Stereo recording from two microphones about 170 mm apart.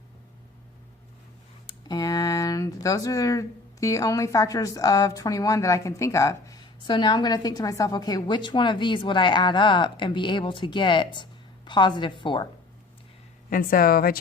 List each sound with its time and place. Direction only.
1.6 s speech: 25° left (ahead or behind)
13.5 s a woman's voice: 55° left (ahead or behind)